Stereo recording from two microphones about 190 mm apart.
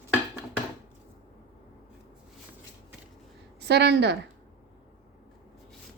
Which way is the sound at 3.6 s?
65° right (ahead or behind).